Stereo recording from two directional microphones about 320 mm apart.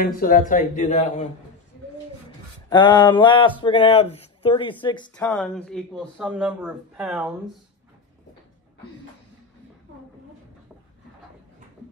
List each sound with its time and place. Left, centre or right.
0.0 s speech: left
2.7 s speech: centre
5.2 s speech: centre